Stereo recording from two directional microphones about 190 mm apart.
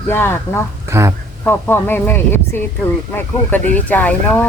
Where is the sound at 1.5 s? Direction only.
10° left (ahead or behind).